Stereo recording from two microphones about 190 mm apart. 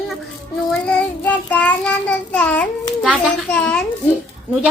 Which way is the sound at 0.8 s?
10° left (ahead or behind).